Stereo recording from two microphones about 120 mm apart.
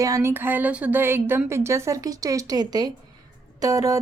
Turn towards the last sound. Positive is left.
turn(degrees=-30)  # may be behind; listen again after turning